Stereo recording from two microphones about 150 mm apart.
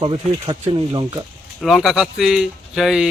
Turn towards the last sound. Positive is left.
turn(degrees=-5)  # may be behind; listen again after turning